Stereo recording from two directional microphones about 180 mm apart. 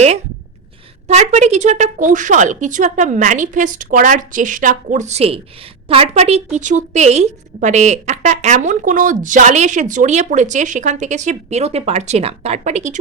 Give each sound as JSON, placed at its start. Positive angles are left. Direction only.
{"t": 1.0, "sound": "a woman's voice", "side_deg": -40}